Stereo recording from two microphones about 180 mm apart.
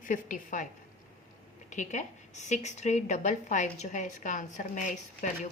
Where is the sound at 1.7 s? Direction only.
40° left (ahead or behind).